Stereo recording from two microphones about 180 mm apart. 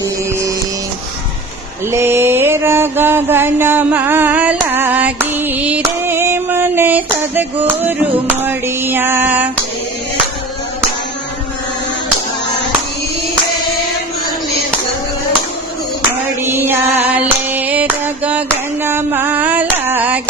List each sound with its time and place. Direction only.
0.0 s music: 15° right (ahead or behind)
1.9 s mantra: 15° right (ahead or behind)
8.4 s female singing: 10° right (ahead or behind)
16.4 s music: 10° right (ahead or behind)
17.1 s a sound: 10° right (ahead or behind)